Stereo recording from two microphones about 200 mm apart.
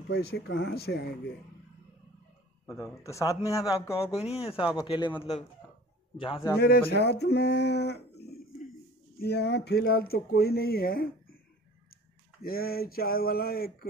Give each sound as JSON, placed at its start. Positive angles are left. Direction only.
{"t": 0.1, "sound": "speech", "side_deg": 55}
{"t": 2.6, "sound": "speech", "side_deg": 15}
{"t": 4.1, "sound": "speech", "side_deg": 30}
{"t": 6.6, "sound": "speech", "side_deg": 50}
{"t": 12.4, "sound": "speech", "side_deg": 50}